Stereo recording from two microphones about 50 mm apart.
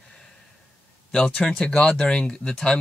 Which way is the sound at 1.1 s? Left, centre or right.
Centre.